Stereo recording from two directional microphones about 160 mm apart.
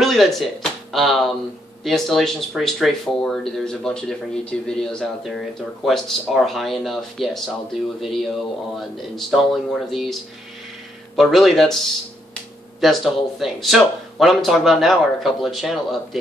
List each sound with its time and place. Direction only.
0.0 s speech: centre (ahead or behind)
11.1 s speech: centre (ahead or behind)